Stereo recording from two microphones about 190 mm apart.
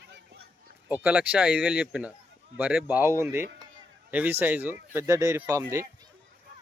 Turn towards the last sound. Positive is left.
turn(degrees=-15)  # may be behind; listen again after turning